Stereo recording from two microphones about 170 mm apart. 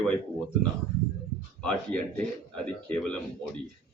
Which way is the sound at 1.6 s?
5° left (ahead or behind).